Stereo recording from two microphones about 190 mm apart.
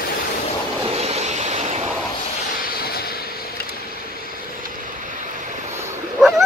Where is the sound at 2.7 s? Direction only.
55° left (ahead or behind).